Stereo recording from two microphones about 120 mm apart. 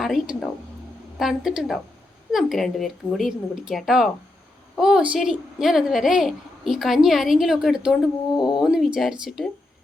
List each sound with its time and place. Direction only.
0.0 s a woman's voice: centre (ahead or behind)